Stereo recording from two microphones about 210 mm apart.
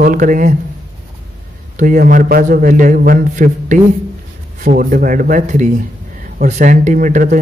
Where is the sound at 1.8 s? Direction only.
40° right (ahead or behind).